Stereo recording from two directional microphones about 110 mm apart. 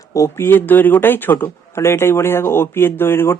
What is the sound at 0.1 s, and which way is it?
Speech, 25° left (ahead or behind).